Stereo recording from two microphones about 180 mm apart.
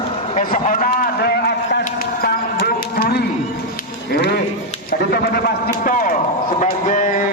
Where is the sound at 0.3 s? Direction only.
45° left (ahead or behind).